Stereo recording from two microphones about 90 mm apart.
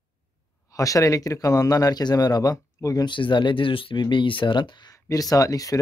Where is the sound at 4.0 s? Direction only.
65° left (ahead or behind).